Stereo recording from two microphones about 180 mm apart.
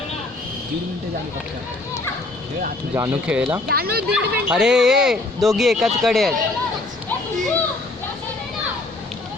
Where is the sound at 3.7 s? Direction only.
60° right (ahead or behind).